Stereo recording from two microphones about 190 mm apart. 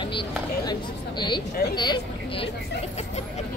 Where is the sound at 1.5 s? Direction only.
55° left (ahead or behind).